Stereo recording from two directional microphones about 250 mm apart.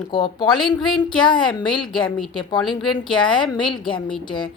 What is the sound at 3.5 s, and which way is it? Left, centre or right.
A woman's voice, centre.